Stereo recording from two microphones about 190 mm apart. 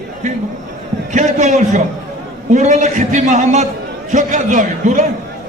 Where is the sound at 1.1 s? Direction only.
40° right (ahead or behind).